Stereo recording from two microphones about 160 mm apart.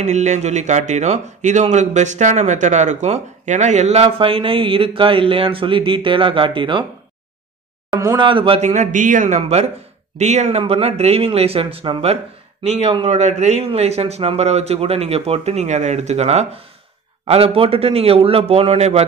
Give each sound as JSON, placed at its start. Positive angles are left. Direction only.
{"t": 0.0, "sound": "a man's voice", "side_deg": -45}
{"t": 7.9, "sound": "a man's voice", "side_deg": -25}
{"t": 9.4, "sound": "a man's voice", "side_deg": -40}